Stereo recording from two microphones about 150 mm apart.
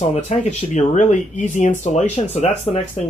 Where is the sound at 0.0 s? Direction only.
50° left (ahead or behind).